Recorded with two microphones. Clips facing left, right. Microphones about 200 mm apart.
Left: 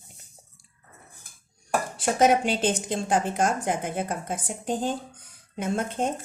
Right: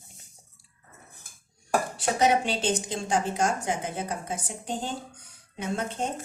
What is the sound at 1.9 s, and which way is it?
A woman's voice, 50° left (ahead or behind).